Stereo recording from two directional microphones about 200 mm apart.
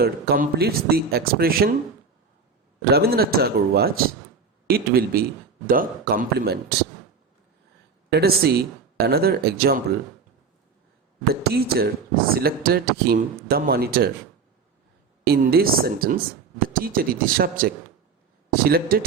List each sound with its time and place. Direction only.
0.0 s speech: 50° right (ahead or behind)
2.9 s speech: 50° right (ahead or behind)
8.1 s speech: 50° right (ahead or behind)
11.4 s speech: 50° right (ahead or behind)
15.3 s speech: 50° right (ahead or behind)